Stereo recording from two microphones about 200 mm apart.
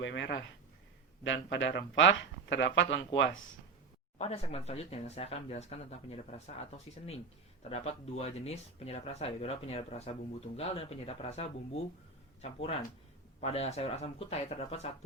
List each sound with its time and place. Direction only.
0.0 s speech: 60° left (ahead or behind)
4.2 s speech: 30° left (ahead or behind)